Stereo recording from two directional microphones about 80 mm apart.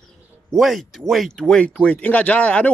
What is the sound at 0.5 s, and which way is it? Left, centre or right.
A man's voice, centre.